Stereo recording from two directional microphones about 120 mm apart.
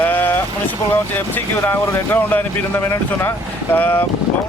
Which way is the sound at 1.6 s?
15° left (ahead or behind).